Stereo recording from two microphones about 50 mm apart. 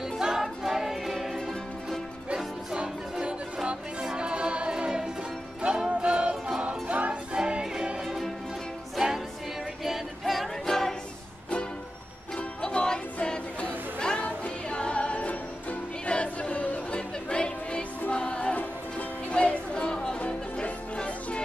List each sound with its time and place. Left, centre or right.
0.2 s music: centre
2.3 s music: centre
8.9 s music: centre
9.8 s choir: centre
12.6 s music: centre
13.6 s music: left
19.3 s a sound: left
20.2 s music: left